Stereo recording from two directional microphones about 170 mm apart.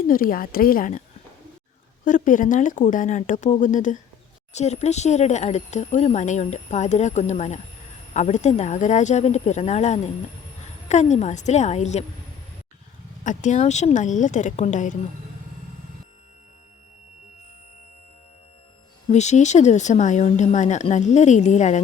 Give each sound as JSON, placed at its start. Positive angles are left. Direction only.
{"t": 0.1, "sound": "speech", "side_deg": 55}
{"t": 2.0, "sound": "speech", "side_deg": 50}
{"t": 13.2, "sound": "speech", "side_deg": 45}
{"t": 19.0, "sound": "speech", "side_deg": 45}